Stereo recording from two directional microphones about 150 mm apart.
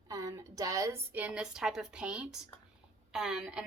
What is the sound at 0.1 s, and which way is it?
A woman's voice, 25° right (ahead or behind).